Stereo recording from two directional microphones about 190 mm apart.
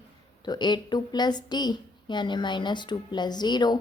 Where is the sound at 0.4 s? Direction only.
25° left (ahead or behind).